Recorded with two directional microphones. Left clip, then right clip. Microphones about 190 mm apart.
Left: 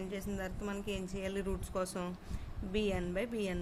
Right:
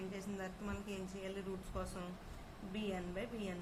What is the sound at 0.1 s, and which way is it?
Speech, 50° left (ahead or behind).